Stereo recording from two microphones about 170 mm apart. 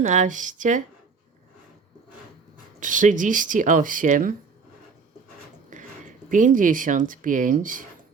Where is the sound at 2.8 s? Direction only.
50° right (ahead or behind).